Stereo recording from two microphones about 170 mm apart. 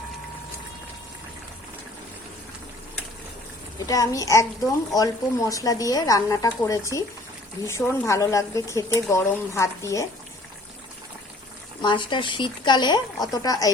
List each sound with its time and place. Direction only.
3.8 s speech: 20° left (ahead or behind)
11.8 s speech: 25° left (ahead or behind)